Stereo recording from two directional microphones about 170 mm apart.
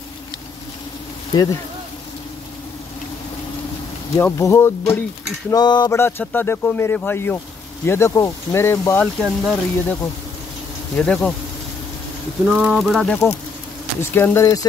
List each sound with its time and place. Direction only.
1.3 s a sound: 20° left (ahead or behind)
4.2 s speech: 15° left (ahead or behind)
5.5 s a sound: 25° left (ahead or behind)
5.9 s speech: 10° left (ahead or behind)
9.0 s speech: centre (ahead or behind)
11.0 s speech: 5° left (ahead or behind)
12.4 s speech: 5° right (ahead or behind)
14.1 s speech: 15° left (ahead or behind)